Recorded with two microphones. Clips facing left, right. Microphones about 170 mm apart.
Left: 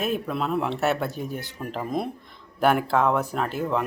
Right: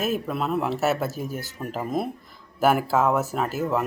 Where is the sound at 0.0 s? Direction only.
5° right (ahead or behind).